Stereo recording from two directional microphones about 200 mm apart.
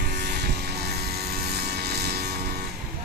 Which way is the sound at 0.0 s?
55° right (ahead or behind).